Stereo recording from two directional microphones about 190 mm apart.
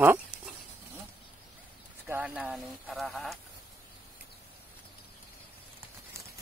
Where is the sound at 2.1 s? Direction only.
5° right (ahead or behind).